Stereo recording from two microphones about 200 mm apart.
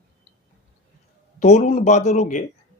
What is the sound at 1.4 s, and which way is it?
Speech, 35° left (ahead or behind).